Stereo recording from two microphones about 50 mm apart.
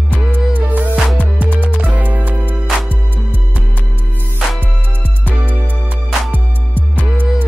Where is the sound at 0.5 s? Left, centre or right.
Right.